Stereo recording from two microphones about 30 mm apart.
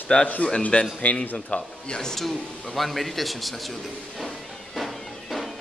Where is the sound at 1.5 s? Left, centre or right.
Left.